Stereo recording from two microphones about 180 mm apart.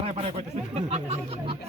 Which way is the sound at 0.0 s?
35° right (ahead or behind).